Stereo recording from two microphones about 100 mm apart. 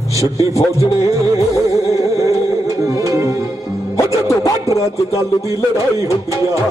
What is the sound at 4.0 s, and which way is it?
Music, 30° left (ahead or behind).